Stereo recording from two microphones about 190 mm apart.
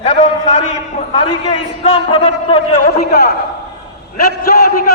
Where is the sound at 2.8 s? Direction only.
55° left (ahead or behind).